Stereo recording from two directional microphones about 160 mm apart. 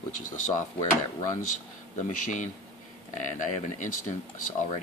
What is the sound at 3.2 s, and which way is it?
Speech, 50° left (ahead or behind).